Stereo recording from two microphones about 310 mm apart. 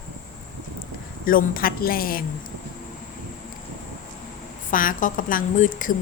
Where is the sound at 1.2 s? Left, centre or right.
Left.